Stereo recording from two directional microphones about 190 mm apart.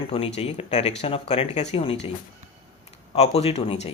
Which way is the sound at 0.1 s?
30° left (ahead or behind).